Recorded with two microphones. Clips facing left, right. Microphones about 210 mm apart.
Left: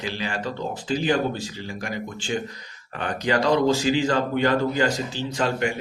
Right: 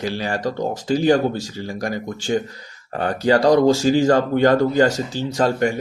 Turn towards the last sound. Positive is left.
turn(degrees=-40)  # may be behind; listen again after turning